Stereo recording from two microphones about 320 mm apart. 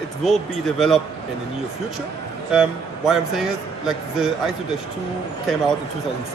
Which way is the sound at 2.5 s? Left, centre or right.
Centre.